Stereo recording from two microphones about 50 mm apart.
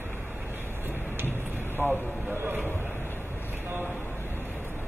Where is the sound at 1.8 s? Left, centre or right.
Right.